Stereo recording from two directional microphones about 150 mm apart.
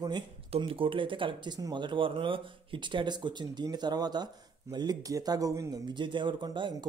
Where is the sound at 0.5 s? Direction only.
35° right (ahead or behind).